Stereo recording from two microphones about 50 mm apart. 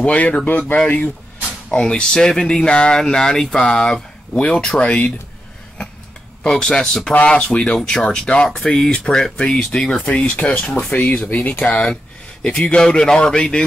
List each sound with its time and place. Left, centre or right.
0.0 s speech: left
1.7 s speech: centre
6.4 s speech: centre
8.5 s speech: centre; by 10.8 s left
10.9 s speech: left; by 13.7 s centre